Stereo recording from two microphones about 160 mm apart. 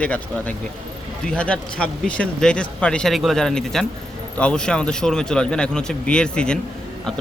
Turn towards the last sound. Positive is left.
turn(degrees=5)  # may be behind; listen again after turning